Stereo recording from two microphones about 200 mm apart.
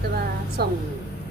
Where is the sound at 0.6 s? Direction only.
50° right (ahead or behind).